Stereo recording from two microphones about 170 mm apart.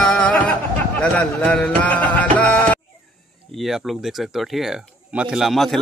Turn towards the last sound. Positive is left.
turn(degrees=0)  # may be behind; listen again after turning